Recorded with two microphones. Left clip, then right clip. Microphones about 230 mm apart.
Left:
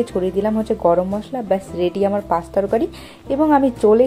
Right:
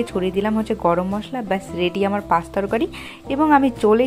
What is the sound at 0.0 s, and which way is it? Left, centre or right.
A woman's voice, right.